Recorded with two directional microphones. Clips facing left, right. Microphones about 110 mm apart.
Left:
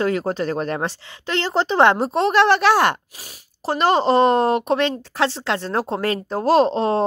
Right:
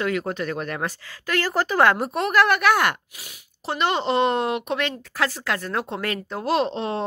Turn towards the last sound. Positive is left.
turn(degrees=35)  # may be behind; listen again after turning